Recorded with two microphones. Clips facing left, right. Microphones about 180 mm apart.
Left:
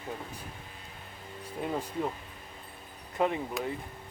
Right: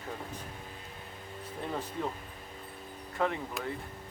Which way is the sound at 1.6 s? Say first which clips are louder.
Left 3 dB; 10° left (ahead or behind).